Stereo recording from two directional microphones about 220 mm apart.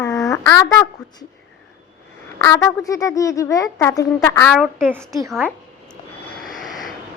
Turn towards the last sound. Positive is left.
turn(degrees=0)  # may be behind; listen again after turning